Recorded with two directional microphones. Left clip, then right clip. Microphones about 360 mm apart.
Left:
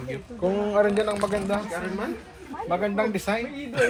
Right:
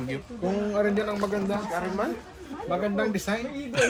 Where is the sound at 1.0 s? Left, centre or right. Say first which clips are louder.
Left 3 dB; centre.